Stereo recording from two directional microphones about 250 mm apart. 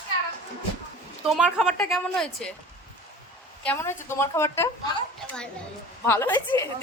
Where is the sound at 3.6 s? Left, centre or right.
Centre.